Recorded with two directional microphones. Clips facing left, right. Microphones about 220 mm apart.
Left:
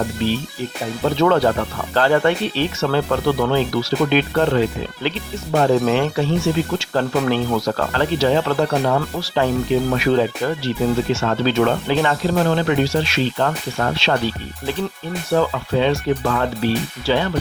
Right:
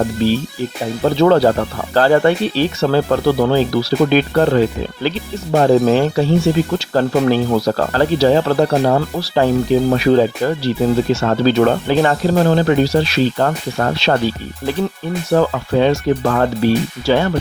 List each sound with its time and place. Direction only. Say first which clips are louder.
1.0 s speech: right 4 dB; 35° right (ahead or behind)
15.3 s speech: right 3 dB; 45° right (ahead or behind)